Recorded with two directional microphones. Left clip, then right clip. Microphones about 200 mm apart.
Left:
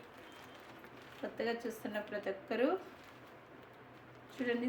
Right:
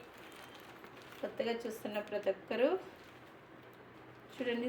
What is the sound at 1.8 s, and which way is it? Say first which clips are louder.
Speech: right 3 dB; 5° left (ahead or behind).